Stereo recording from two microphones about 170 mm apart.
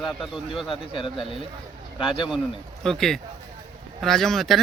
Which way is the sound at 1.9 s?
30° left (ahead or behind).